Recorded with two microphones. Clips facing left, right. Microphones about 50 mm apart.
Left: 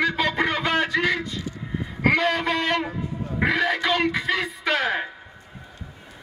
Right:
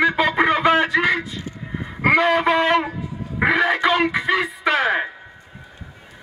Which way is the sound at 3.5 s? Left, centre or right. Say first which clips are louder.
Right 5 dB; centre.